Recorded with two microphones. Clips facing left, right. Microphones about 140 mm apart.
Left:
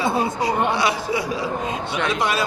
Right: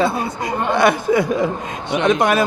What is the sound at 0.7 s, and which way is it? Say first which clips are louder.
Chuckle: right 7 dB; 50° right (ahead or behind).